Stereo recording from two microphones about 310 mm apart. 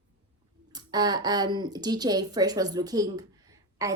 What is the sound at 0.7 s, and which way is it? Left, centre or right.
A woman's voice, centre.